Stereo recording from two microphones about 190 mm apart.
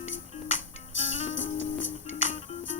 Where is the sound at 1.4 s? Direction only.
90° left.